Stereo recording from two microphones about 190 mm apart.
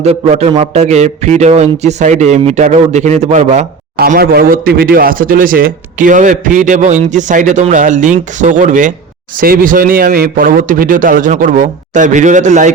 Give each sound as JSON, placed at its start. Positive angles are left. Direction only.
{"t": 0.0, "sound": "speech", "side_deg": -35}
{"t": 3.9, "sound": "a man's voice", "side_deg": -55}